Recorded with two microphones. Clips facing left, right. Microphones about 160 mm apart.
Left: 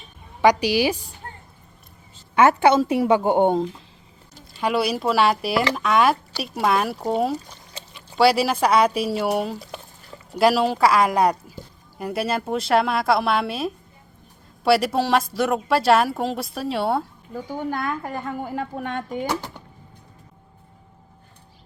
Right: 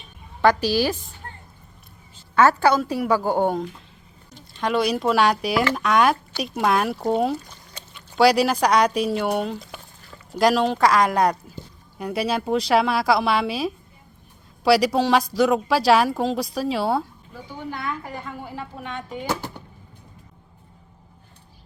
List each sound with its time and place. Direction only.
0.4 s a woman's voice: 15° left (ahead or behind)
1.2 s a sound: 25° left (ahead or behind)
2.3 s a woman's voice: 20° left (ahead or behind)
4.5 s speech: 5° left (ahead or behind)
17.3 s a woman's voice: 45° left (ahead or behind)